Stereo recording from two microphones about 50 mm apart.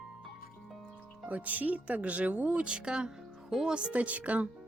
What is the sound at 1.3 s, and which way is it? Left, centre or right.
Speech, right.